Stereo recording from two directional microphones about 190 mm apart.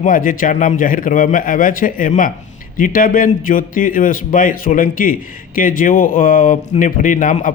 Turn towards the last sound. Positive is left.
turn(degrees=40)  # may be behind; listen again after turning